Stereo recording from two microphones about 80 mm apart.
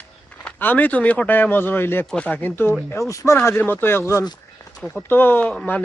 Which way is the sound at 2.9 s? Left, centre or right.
Left.